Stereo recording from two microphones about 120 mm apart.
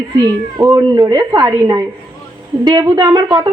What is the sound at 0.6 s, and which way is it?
A woman's voice, 30° right (ahead or behind).